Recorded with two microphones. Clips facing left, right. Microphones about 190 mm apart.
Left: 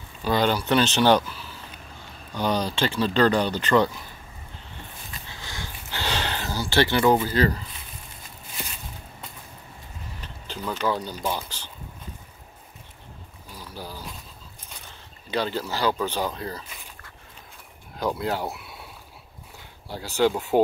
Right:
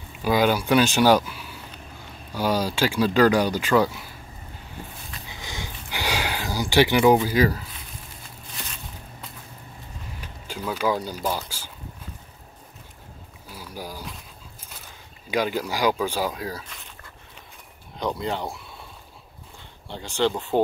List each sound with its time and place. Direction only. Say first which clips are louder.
0.2 s speech: right 2 dB; 10° right (ahead or behind)
5.3 s a sound: right 3 dB; 15° right (ahead or behind)
7.2 s speech: right 2 dB; 10° right (ahead or behind)
10.2 s boiling: right 1 dB; 10° right (ahead or behind)
13.5 s a sound: right 2 dB; 10° right (ahead or behind)
15.3 s speech: right 2 dB; 10° right (ahead or behind)
17.9 s speech: left 1 dB; 5° left (ahead or behind)
19.9 s speech: left 2 dB; 5° left (ahead or behind)